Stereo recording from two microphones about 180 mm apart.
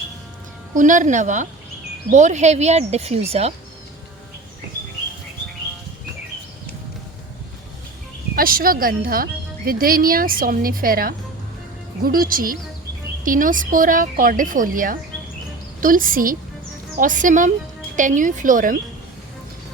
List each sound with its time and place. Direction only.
0.8 s a woman's voice: 45° right (ahead or behind)
8.4 s a woman's voice: 55° right (ahead or behind)